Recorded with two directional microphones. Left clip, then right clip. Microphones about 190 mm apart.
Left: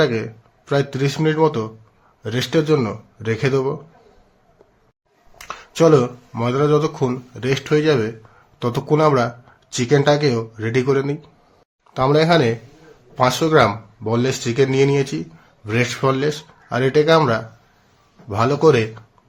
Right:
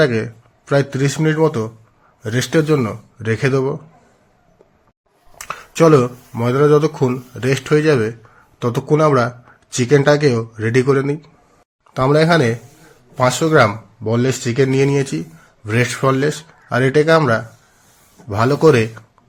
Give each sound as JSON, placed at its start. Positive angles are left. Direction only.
{"t": 0.0, "sound": "speech", "side_deg": -15}
{"t": 5.4, "sound": "speech", "side_deg": -15}